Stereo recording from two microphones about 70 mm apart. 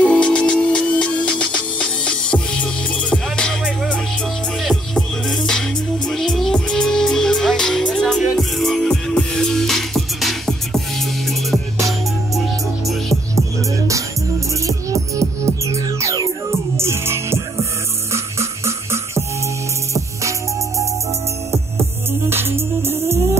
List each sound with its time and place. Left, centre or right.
0.0 s music: centre
6.0 s music: centre
14.7 s music: right
22.3 s music: right